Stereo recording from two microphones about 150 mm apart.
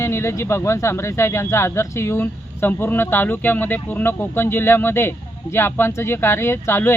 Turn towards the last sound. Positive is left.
turn(degrees=15)  # may be behind; listen again after turning